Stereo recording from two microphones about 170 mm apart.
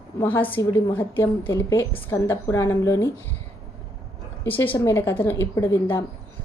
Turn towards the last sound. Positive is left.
turn(degrees=15)  # may be behind; listen again after turning